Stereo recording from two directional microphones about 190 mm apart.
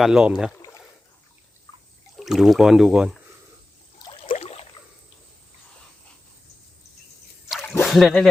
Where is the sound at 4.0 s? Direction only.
25° left (ahead or behind).